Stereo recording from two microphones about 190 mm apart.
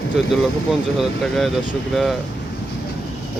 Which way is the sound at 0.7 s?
Centre (ahead or behind).